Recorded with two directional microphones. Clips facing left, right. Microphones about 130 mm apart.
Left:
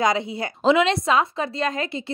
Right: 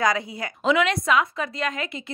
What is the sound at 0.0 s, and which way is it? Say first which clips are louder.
A woman's voice: left 2 dB; 25° left (ahead or behind).